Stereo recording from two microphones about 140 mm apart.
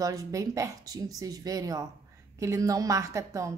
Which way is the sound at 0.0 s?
25° right (ahead or behind).